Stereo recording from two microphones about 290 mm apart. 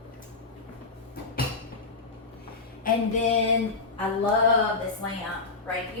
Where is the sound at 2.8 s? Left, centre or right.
Left.